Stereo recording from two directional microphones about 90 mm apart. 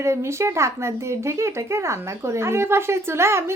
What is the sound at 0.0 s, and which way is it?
Speech, 30° right (ahead or behind).